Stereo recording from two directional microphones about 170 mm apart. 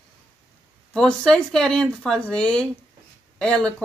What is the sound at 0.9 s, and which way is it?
A woman's voice, 5° left (ahead or behind).